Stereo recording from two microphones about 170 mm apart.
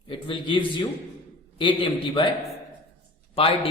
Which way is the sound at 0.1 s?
30° left (ahead or behind).